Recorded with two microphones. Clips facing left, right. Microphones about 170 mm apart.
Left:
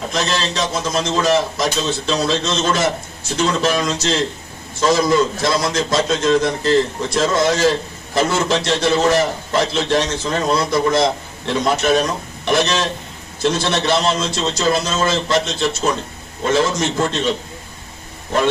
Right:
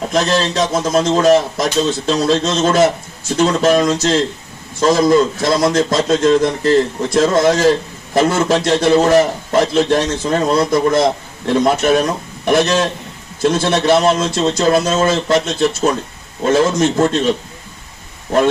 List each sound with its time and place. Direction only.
0.1 s a man's voice: 45° right (ahead or behind)
16.5 s a man's voice: 45° right (ahead or behind)